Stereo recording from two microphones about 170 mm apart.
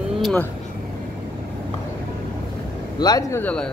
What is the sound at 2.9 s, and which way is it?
Speech, 25° left (ahead or behind).